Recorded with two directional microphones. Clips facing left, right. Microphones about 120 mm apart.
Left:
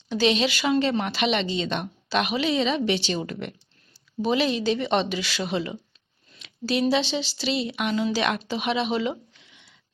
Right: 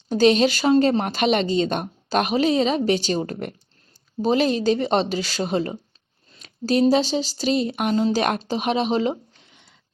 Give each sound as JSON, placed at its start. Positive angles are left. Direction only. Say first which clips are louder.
{"t": 0.1, "sound": "speech", "louder": "right 6 dB", "side_deg": -45}